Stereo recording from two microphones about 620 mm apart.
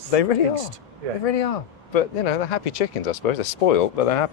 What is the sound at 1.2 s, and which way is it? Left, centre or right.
Speech, left.